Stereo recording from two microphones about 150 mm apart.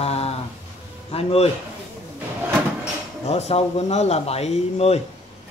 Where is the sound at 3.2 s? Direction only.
45° left (ahead or behind).